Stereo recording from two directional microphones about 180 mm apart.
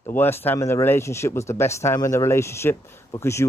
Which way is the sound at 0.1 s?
10° left (ahead or behind).